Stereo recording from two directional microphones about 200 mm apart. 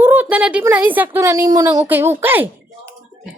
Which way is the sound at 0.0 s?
10° right (ahead or behind).